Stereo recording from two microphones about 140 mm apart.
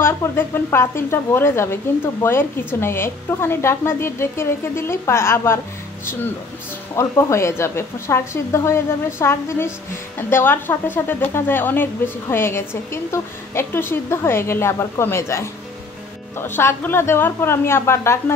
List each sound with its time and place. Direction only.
0.0 s a woman's voice: 15° left (ahead or behind)
7.0 s a woman's voice: 20° left (ahead or behind)